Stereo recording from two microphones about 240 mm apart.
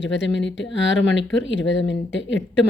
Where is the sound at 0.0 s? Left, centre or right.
Left.